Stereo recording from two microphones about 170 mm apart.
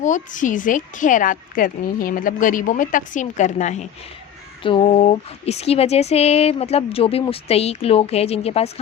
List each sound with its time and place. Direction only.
0.0 s a woman's voice: 50° left (ahead or behind)
4.6 s speech: 30° left (ahead or behind)